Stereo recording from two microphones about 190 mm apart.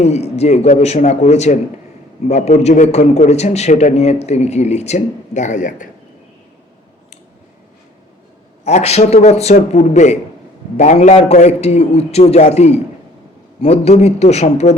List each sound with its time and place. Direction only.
0.0 s a man's voice: 35° left (ahead or behind)
8.6 s a man's voice: 35° left (ahead or behind)